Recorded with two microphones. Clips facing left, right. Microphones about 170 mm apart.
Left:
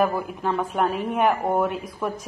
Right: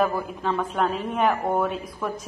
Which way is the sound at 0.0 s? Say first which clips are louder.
Left 1 dB; 5° left (ahead or behind).